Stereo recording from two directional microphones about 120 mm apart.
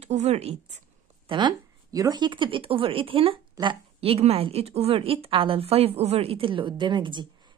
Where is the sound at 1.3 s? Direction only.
40° right (ahead or behind).